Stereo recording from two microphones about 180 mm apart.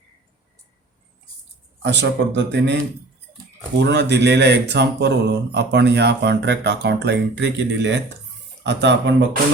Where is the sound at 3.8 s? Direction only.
75° right (ahead or behind).